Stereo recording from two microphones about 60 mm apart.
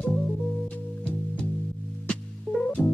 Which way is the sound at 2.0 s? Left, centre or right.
Centre.